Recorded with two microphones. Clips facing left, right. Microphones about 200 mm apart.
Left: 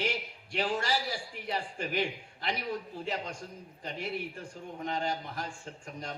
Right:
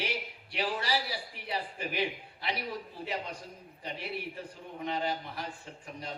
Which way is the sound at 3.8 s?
45° left (ahead or behind).